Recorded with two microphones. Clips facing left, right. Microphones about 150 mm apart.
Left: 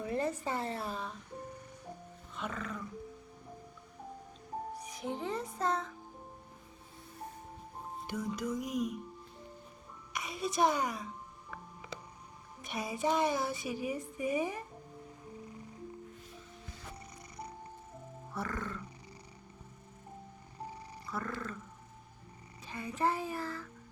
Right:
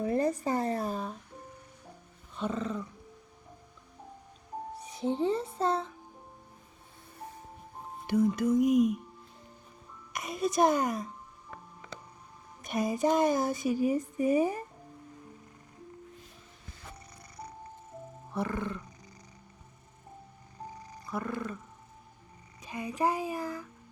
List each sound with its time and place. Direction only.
0.0 s a sound: 40° right (ahead or behind)
2.3 s music: 30° right (ahead or behind)
4.7 s music: 30° right (ahead or behind)
8.0 s music: 55° right (ahead or behind)
10.1 s a sound: 45° right (ahead or behind)
12.6 s speech: 45° right (ahead or behind)
18.3 s roaring cats: 20° right (ahead or behind)
21.1 s roaring cats: 15° right (ahead or behind)
22.6 s a child's voice: 15° right (ahead or behind)